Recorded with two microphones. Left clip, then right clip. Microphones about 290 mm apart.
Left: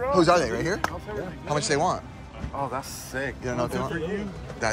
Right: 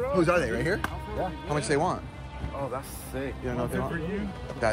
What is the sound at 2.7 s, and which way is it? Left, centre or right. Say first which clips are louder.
Speech: left 3 dB; left.